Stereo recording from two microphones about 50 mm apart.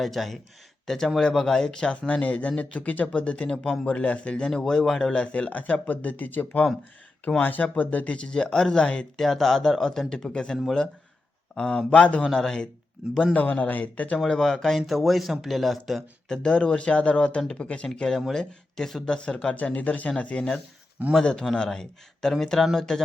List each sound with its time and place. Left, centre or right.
0.0 s speech: centre
4.5 s speech: centre
9.1 s speech: centre; by 12.2 s left
12.2 s speech: centre
13.3 s speech: left
14.3 s speech: centre
16.3 s speech: centre
18.3 s speech: centre
19.5 s speech: left
21.0 s a man's voice: right
21.5 s speech: centre